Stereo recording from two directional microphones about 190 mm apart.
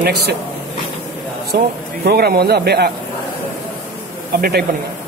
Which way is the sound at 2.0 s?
55° right (ahead or behind).